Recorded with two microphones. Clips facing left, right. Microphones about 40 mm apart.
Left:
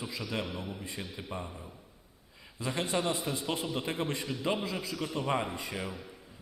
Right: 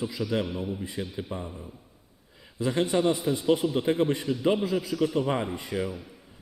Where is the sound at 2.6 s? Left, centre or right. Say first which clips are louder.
Right 7 dB; right.